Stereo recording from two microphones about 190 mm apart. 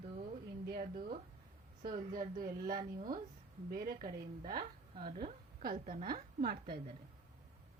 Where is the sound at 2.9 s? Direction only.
45° right (ahead or behind).